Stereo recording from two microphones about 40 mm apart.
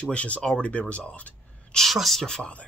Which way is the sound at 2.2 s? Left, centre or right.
Centre.